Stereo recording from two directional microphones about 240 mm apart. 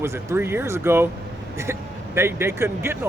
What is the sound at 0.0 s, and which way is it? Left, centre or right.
Speech, centre.